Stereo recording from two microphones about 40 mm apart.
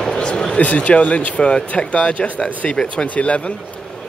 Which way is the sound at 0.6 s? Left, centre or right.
Left.